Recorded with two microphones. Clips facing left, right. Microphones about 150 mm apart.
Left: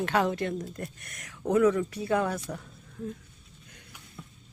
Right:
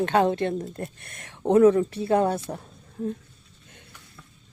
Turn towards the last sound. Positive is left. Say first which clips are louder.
# right 7 dB
turn(degrees=-35)  # may be behind; listen again after turning